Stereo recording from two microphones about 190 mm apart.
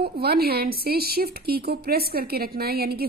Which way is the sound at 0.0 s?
55° right (ahead or behind).